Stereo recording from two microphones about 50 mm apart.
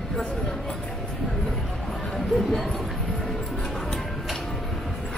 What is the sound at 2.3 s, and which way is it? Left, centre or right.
Basketball bounce, centre.